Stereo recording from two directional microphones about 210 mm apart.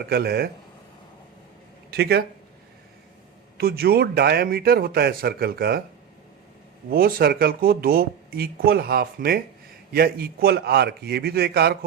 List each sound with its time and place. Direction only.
0.0 s speech: 45° right (ahead or behind)
1.9 s speech: 50° right (ahead or behind)
3.6 s speech: 50° right (ahead or behind)
6.9 s speech: 45° right (ahead or behind)